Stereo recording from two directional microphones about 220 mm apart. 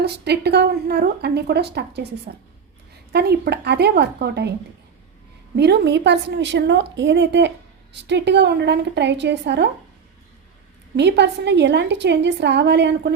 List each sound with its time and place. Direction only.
0.0 s a woman's voice: 50° right (ahead or behind)
5.5 s a woman's voice: 50° right (ahead or behind)
10.9 s a woman's voice: 50° right (ahead or behind)